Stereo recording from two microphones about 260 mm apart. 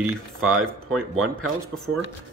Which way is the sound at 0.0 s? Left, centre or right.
Right.